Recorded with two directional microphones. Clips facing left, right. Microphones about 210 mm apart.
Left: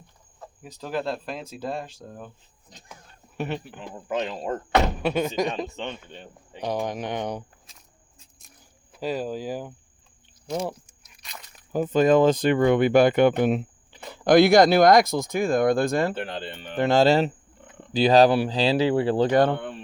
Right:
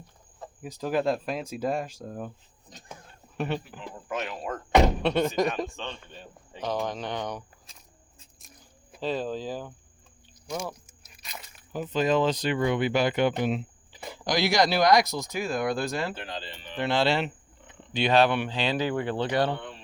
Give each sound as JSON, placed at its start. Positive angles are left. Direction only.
{"t": 0.6, "sound": "speech", "side_deg": -10}
{"t": 3.3, "sound": "speech", "side_deg": 5}
{"t": 3.8, "sound": "speech", "side_deg": 25}
{"t": 5.0, "sound": "speech", "side_deg": 5}
{"t": 5.6, "sound": "speech", "side_deg": 20}
{"t": 9.0, "sound": "speech", "side_deg": 10}
{"t": 10.5, "sound": "speech", "side_deg": 25}
{"t": 11.2, "sound": "crunch", "side_deg": -5}
{"t": 11.7, "sound": "speech", "side_deg": 50}